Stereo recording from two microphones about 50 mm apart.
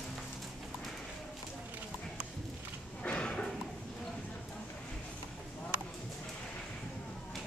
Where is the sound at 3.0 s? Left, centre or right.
Left.